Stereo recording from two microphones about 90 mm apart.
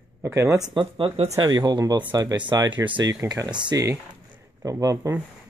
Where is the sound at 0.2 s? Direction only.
30° right (ahead or behind).